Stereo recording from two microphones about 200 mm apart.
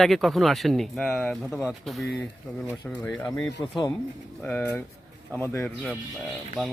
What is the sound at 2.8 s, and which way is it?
Speech, 10° left (ahead or behind).